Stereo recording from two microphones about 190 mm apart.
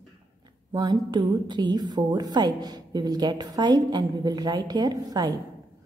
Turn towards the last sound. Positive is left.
turn(degrees=-20)  # may be behind; listen again after turning